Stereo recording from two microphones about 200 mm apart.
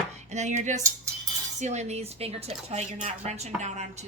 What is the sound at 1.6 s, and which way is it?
Speech, 35° right (ahead or behind).